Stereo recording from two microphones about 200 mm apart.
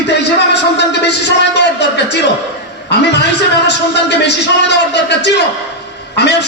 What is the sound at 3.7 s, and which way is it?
A man's voice, 60° left (ahead or behind).